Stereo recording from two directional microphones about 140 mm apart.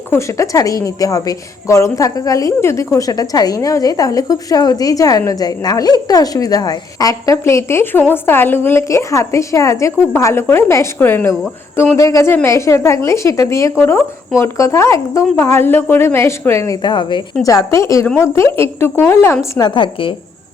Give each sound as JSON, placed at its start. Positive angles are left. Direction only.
{"t": 0.1, "sound": "a woman's voice", "side_deg": 20}
{"t": 19.5, "sound": "a woman's voice", "side_deg": 30}